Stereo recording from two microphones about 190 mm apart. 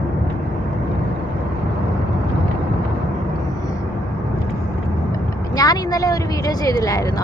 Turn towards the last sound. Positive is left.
turn(degrees=20)  # may be behind; listen again after turning